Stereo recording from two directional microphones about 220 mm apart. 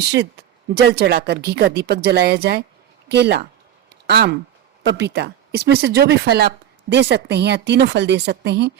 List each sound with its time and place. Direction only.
0.0 s speech: 50° right (ahead or behind)